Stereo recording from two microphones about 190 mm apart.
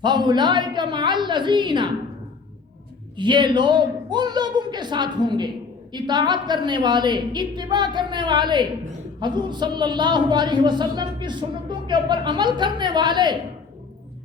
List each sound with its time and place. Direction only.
0.0 s a woman's voice: 25° right (ahead or behind)
3.2 s a woman's voice: 25° right (ahead or behind)